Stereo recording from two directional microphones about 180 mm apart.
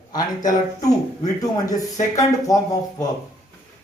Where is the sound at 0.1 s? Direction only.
20° left (ahead or behind).